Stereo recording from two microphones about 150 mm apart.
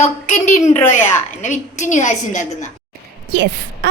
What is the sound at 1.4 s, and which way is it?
A woman's voice, 55° left (ahead or behind).